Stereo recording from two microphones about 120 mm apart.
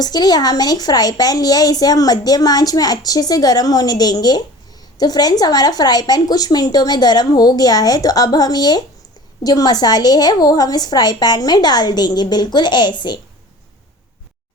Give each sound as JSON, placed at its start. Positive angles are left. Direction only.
{"t": 0.0, "sound": "a woman's voice", "side_deg": 35}